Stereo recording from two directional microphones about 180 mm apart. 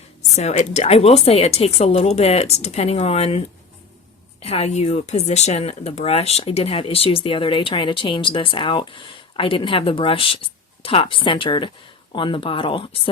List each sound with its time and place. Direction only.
0.3 s speech: 40° left (ahead or behind)